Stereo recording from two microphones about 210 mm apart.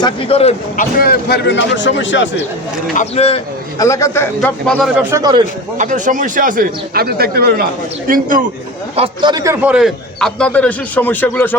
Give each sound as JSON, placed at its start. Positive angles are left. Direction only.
{"t": 0.0, "sound": "a man's voice", "side_deg": 25}
{"t": 0.9, "sound": "speech", "side_deg": 45}
{"t": 2.9, "sound": "a man's voice", "side_deg": 30}
{"t": 3.8, "sound": "a man's voice", "side_deg": 15}
{"t": 4.9, "sound": "a man's voice", "side_deg": -15}
{"t": 5.7, "sound": "speech", "side_deg": -35}
{"t": 9.0, "sound": "a man's voice", "side_deg": -20}